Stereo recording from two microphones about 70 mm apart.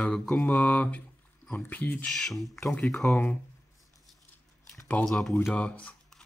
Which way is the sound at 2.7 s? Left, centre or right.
Left.